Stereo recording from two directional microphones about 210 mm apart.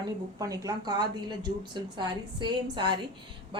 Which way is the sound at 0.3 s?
15° right (ahead or behind).